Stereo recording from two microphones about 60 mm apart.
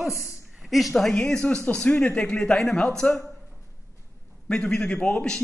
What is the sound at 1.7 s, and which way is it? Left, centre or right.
A man's voice, left.